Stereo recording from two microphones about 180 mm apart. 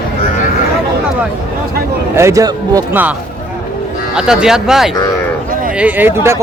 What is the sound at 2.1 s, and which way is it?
Speech, 15° right (ahead or behind).